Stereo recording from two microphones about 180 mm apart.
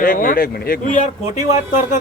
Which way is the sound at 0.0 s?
50° left (ahead or behind).